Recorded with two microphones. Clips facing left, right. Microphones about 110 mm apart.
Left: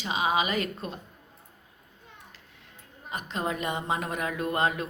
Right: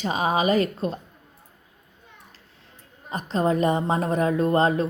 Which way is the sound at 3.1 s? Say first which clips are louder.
Right 8 dB; 35° right (ahead or behind).